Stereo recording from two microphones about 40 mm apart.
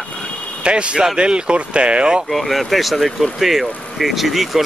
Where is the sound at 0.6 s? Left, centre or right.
Right.